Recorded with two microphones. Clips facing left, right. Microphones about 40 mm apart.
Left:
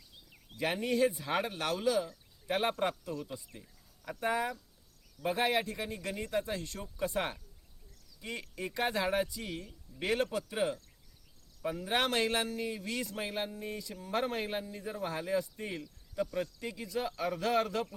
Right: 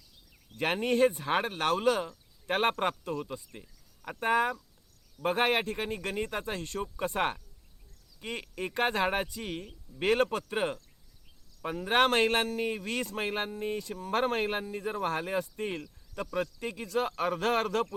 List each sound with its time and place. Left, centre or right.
0.5 s speech: right